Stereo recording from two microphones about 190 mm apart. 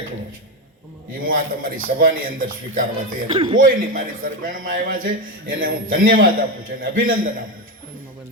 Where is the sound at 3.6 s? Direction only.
50° right (ahead or behind).